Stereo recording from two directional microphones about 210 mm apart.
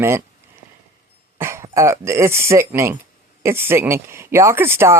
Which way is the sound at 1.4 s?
15° right (ahead or behind).